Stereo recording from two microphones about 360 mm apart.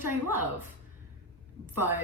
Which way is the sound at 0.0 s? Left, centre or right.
Centre.